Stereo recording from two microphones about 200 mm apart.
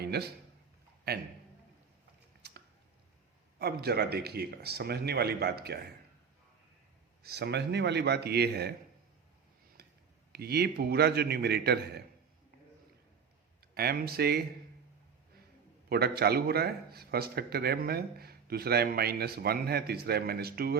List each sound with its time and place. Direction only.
0.0 s a sound: 55° right (ahead or behind)
1.1 s a man's voice: 55° right (ahead or behind)
2.4 s a sound: 55° right (ahead or behind)
3.6 s speech: 55° right (ahead or behind)
7.2 s a man's voice: 55° right (ahead or behind)
9.8 s a sound: 50° right (ahead or behind)
10.3 s speech: 50° right (ahead or behind)
13.7 s speech: 50° right (ahead or behind)
15.9 s speech: 50° right (ahead or behind)